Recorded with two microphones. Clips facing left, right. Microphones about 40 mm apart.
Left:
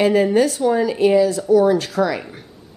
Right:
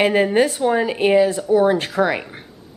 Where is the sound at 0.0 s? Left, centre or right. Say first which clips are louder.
Left 1 dB; right.